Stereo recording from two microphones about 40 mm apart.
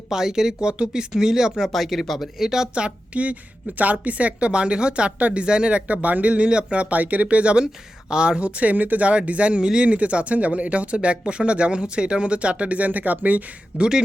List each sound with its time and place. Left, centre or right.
0.1 s speech: centre
1.7 s speech: centre
2.4 s speech: centre
2.7 s speech: right
5.9 s speech: right
8.1 s speech: right
8.4 s speech: right
8.7 s speech: right
13.7 s speech: right